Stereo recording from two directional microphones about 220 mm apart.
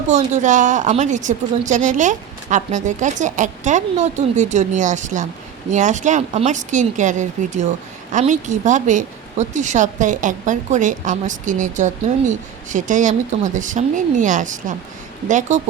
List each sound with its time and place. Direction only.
0.1 s a woman's voice: 35° right (ahead or behind)